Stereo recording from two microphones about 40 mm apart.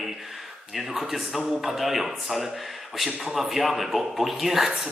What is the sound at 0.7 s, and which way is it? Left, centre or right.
A man's voice, centre.